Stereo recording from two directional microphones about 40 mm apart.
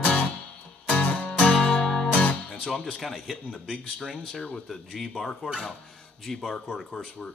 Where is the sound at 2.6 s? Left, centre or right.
Centre.